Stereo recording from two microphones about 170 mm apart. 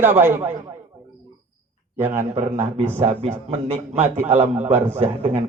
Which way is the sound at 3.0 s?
35° right (ahead or behind).